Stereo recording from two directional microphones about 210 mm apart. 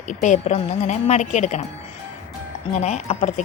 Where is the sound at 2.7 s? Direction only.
35° left (ahead or behind).